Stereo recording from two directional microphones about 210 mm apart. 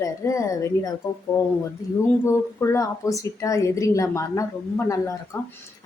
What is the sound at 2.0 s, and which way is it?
Speech, 15° left (ahead or behind).